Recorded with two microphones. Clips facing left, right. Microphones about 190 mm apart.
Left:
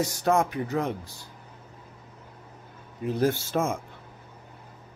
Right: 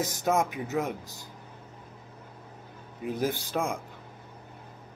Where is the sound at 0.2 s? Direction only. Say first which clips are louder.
Left 3 dB; centre (ahead or behind).